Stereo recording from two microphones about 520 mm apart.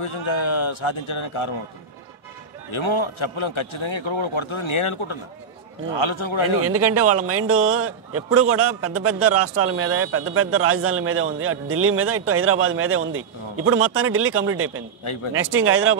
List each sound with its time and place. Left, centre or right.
0.0 s a man's voice: left
2.7 s a man's voice: left
6.6 s a man's voice: right